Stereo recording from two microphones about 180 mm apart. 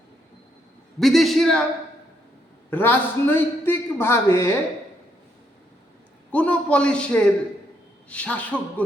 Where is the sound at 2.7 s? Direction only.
10° left (ahead or behind).